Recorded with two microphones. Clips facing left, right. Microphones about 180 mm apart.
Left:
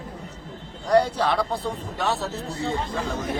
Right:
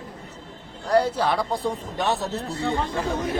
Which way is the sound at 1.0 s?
10° right (ahead or behind).